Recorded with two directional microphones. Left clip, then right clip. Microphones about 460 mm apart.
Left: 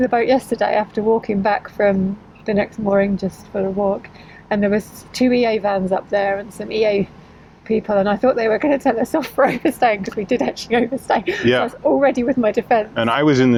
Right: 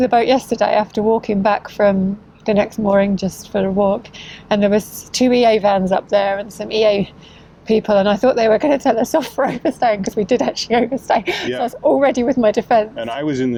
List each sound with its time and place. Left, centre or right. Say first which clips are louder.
0.0 s a woman's voice: right 2 dB; centre
13.0 s speech: left 6 dB; left